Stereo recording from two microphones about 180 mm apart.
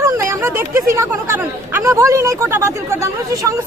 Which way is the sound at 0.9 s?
15° right (ahead or behind).